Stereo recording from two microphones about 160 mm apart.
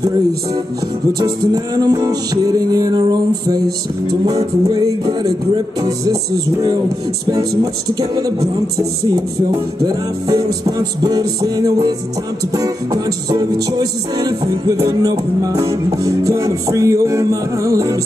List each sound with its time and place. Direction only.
1.2 s music: 25° right (ahead or behind)
4.6 s music: 25° right (ahead or behind)
8.0 s music: 20° right (ahead or behind)
10.2 s music: 25° right (ahead or behind)